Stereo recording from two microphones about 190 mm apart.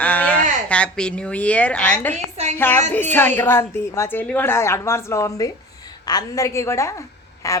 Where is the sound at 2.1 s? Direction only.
35° right (ahead or behind).